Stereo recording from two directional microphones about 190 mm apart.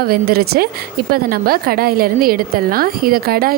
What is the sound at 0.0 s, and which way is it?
A woman's voice, 55° right (ahead or behind).